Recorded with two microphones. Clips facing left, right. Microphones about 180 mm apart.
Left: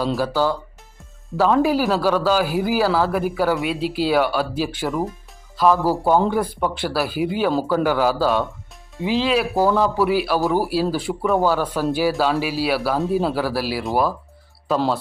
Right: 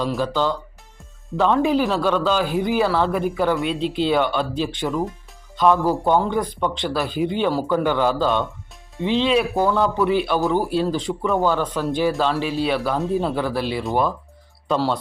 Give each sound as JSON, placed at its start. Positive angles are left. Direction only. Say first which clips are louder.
{"t": 0.2, "sound": "a man's voice", "louder": "left 1 dB", "side_deg": 10}